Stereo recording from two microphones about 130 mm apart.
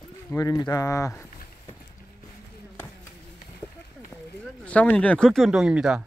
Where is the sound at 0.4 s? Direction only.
30° left (ahead or behind).